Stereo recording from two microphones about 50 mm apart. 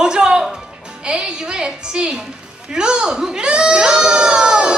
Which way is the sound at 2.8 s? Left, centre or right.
Centre.